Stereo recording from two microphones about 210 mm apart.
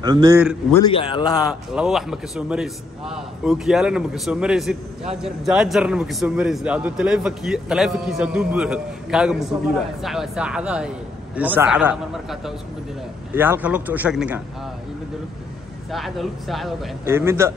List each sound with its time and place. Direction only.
0.0 s speech: 20° right (ahead or behind)
0.8 s a man's voice: 20° left (ahead or behind)
1.5 s a man's voice: centre (ahead or behind)
15.9 s a man's voice: centre (ahead or behind)
17.0 s speech: 10° right (ahead or behind)